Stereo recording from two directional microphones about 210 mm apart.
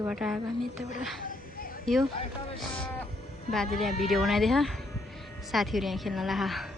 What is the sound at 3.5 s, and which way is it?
Speech, centre (ahead or behind).